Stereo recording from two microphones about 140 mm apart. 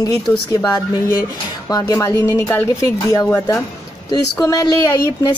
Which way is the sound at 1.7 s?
25° left (ahead or behind).